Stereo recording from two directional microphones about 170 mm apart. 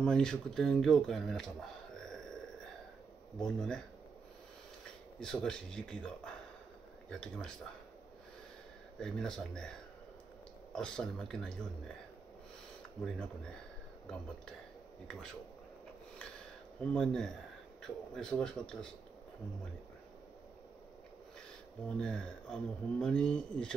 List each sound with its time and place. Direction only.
0.0 s speech: 5° left (ahead or behind)
2.0 s a sound: 5° left (ahead or behind)
3.3 s speech: 5° left (ahead or behind)
5.2 s speech: 5° left (ahead or behind)
9.0 s speech: 5° left (ahead or behind)
13.0 s speech: 5° left (ahead or behind)
16.9 s speech: 5° left (ahead or behind)
21.8 s speech: 5° left (ahead or behind)